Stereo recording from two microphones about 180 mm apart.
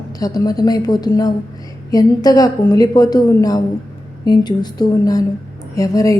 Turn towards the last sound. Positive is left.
turn(degrees=20)  # may be behind; listen again after turning